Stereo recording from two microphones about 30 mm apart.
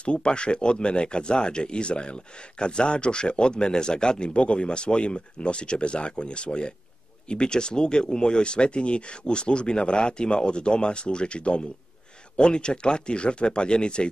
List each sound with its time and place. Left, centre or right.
0.0 s speech: left